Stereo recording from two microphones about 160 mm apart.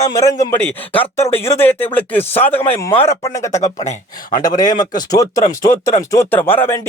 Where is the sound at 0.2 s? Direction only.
20° left (ahead or behind).